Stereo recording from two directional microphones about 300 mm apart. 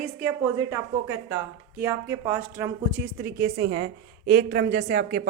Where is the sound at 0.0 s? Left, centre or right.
Centre.